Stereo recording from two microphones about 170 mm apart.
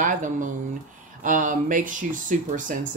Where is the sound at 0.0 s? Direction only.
50° right (ahead or behind).